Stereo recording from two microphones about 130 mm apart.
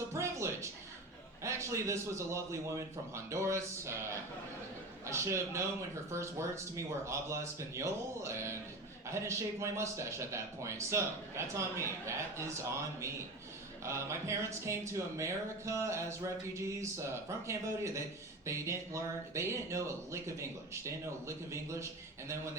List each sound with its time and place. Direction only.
0.1 s a sound: 20° right (ahead or behind)
1.5 s speech: 20° right (ahead or behind)
5.0 s speech: 20° right (ahead or behind)
13.8 s speech: 20° right (ahead or behind)